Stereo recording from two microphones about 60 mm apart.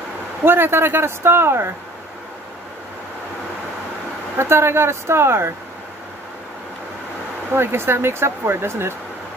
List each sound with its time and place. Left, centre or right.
0.5 s speech: right
4.4 s speech: right
7.5 s speech: right